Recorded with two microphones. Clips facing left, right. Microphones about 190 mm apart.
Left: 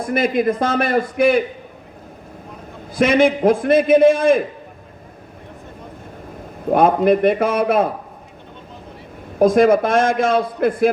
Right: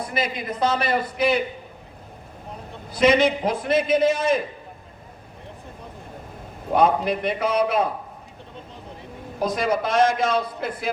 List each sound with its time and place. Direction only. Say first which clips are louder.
0.1 s a man's voice: left 15 dB; 55° left (ahead or behind)
2.9 s a man's voice: left 3 dB; 50° left (ahead or behind)
6.7 s a man's voice: left 6 dB; 55° left (ahead or behind)
9.4 s a man's voice: left 10 dB; 50° left (ahead or behind)